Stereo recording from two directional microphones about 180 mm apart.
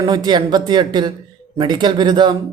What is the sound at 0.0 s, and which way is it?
Speech, 25° right (ahead or behind).